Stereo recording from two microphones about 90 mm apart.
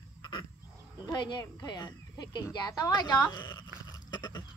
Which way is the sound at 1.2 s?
55° left (ahead or behind).